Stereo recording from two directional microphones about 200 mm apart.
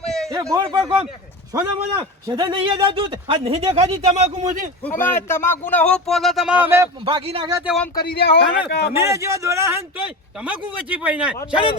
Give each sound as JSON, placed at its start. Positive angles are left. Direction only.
{"t": 0.0, "sound": "a sound", "side_deg": 0}
{"t": 0.3, "sound": "speech", "side_deg": -15}
{"t": 4.8, "sound": "speech", "side_deg": 10}
{"t": 7.0, "sound": "speech", "side_deg": -25}
{"t": 7.6, "sound": "speech", "side_deg": 0}
{"t": 8.0, "sound": "speech", "side_deg": 50}
{"t": 8.9, "sound": "speech", "side_deg": -15}